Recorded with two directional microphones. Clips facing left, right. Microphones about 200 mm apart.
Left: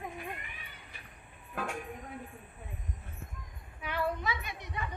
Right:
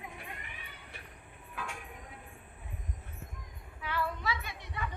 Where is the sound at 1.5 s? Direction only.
50° left (ahead or behind).